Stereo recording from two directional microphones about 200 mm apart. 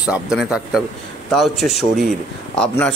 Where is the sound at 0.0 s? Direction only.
Centre (ahead or behind).